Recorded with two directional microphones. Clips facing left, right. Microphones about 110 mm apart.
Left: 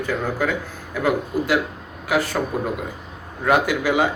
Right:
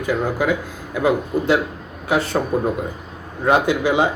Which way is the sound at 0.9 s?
25° right (ahead or behind).